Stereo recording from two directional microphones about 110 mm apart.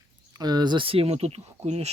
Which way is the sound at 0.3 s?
40° right (ahead or behind).